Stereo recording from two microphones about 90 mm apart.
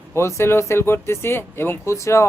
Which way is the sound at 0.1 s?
30° left (ahead or behind).